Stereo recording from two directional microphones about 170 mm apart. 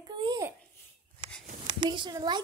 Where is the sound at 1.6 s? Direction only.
30° right (ahead or behind).